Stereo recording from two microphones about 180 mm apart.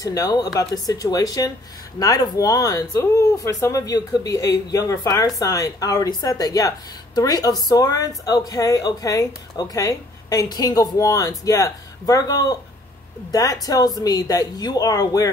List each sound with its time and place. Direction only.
0.0 s speech: 20° left (ahead or behind)